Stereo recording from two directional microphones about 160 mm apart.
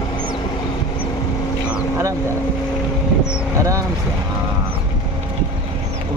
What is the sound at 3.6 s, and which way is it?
Speech, 20° right (ahead or behind).